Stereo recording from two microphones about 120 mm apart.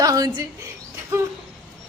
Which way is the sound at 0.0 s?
30° right (ahead or behind).